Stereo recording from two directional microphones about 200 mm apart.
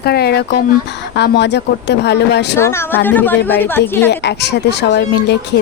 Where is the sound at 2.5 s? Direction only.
15° left (ahead or behind).